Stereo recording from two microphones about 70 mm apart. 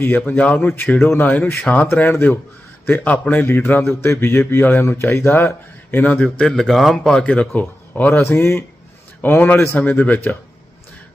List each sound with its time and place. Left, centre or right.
0.3 s speech: left
0.9 s speech: left
1.9 s a man's voice: left
6.0 s speech: left
6.4 s a man's voice: centre
7.5 s a man's voice: left